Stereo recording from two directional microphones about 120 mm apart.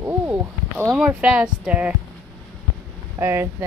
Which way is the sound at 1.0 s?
10° right (ahead or behind).